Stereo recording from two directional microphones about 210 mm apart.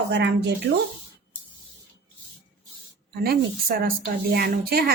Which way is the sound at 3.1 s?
45° right (ahead or behind).